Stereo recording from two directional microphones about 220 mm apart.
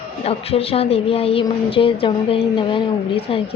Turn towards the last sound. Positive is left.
turn(degrees=25)  # may be behind; listen again after turning